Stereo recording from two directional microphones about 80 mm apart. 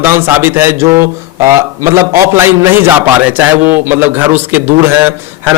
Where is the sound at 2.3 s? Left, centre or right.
Right.